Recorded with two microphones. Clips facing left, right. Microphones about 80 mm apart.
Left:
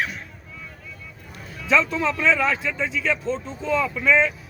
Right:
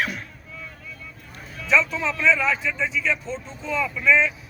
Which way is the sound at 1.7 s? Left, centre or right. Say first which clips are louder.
Left 1 dB; left.